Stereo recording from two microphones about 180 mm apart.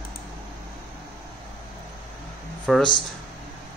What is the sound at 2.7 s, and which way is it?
Speech, centre (ahead or behind).